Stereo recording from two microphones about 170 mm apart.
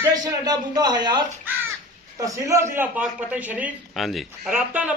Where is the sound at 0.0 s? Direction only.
20° right (ahead or behind).